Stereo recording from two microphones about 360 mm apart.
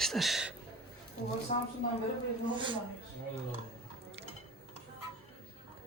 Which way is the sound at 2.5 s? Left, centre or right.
Centre.